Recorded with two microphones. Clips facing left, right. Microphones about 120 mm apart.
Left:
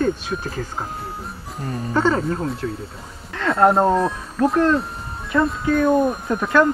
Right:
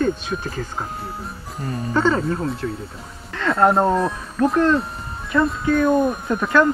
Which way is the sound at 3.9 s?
Centre (ahead or behind).